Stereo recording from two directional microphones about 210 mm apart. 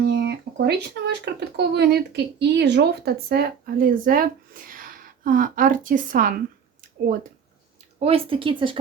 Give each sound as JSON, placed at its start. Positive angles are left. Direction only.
{"t": 0.0, "sound": "speech", "side_deg": -55}
{"t": 7.9, "sound": "speech", "side_deg": -30}